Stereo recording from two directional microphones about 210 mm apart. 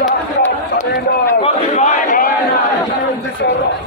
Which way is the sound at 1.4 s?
35° left (ahead or behind).